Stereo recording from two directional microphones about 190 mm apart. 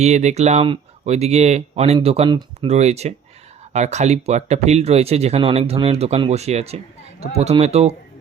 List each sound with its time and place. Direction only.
0.0 s speech: 35° right (ahead or behind)